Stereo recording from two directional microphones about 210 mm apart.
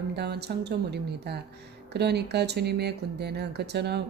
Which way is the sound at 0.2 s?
50° right (ahead or behind).